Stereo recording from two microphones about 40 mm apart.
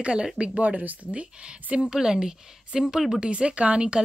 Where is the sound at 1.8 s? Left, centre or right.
Centre.